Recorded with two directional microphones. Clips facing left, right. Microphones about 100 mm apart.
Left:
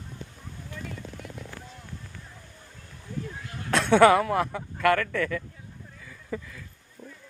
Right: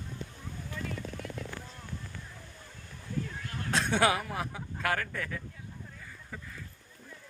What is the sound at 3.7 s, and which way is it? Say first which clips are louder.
Speech: left 10 dB; 65° left (ahead or behind).